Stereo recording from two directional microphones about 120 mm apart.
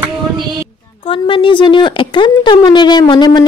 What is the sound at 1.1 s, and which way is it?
Speech, 45° left (ahead or behind).